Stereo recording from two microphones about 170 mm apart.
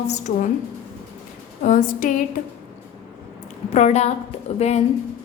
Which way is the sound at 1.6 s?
55° left (ahead or behind).